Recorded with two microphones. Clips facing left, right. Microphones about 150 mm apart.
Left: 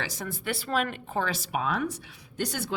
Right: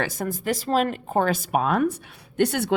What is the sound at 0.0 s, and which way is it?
Speech, 50° right (ahead or behind).